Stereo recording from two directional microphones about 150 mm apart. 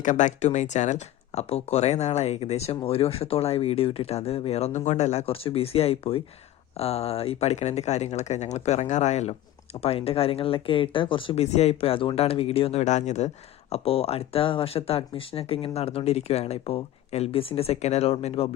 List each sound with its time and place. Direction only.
0.0 s speech: 55° left (ahead or behind); by 18.4 s 40° left (ahead or behind)